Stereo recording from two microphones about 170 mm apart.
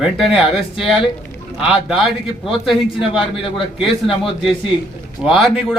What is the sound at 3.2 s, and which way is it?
A man's voice, 30° left (ahead or behind).